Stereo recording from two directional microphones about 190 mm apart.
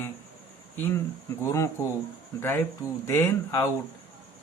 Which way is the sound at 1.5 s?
15° left (ahead or behind).